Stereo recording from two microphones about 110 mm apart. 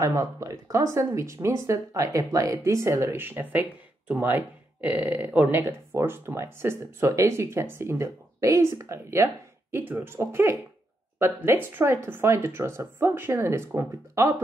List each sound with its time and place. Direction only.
0.0 s speech: 30° right (ahead or behind)